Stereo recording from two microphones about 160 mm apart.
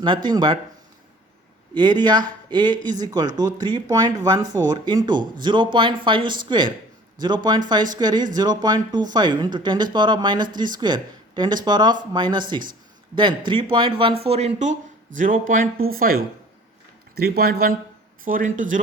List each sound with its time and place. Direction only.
0.3 s speech: 25° right (ahead or behind)
1.7 s speech: 25° right (ahead or behind); by 14.8 s 45° right (ahead or behind)
15.2 s speech: 55° right (ahead or behind)
17.2 s speech: 75° right (ahead or behind)
18.3 s speech: 55° right (ahead or behind)